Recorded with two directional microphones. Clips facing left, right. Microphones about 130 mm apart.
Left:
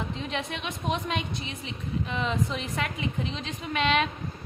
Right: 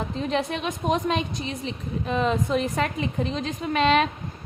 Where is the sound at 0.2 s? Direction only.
40° right (ahead or behind).